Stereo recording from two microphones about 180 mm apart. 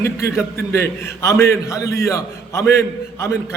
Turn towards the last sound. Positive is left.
turn(degrees=15)  # may be behind; listen again after turning